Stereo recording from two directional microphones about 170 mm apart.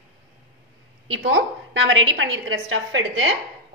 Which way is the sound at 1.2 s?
90° right.